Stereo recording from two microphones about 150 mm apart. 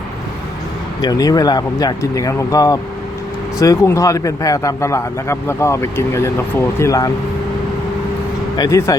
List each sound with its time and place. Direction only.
1.0 s speech: 25° left (ahead or behind)
8.5 s speech: 25° left (ahead or behind)